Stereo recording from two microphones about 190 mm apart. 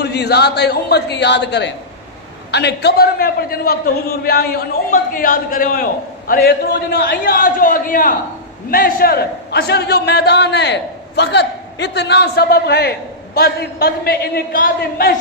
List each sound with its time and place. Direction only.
0.0 s a man's voice: 60° left (ahead or behind)